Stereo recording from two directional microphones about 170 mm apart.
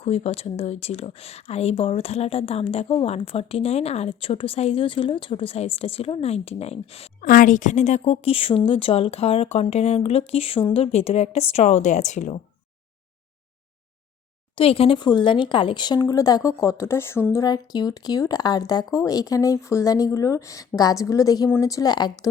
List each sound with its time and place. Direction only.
0.0 s speech: 35° left (ahead or behind)
7.2 s speech: 55° left (ahead or behind)
14.5 s speech: 35° left (ahead or behind)